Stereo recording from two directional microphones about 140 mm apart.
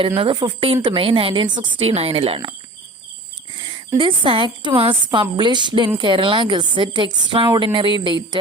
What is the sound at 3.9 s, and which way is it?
A woman's voice, 35° right (ahead or behind).